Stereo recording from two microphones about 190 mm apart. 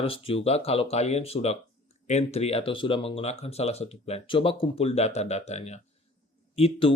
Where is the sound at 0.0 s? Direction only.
30° left (ahead or behind).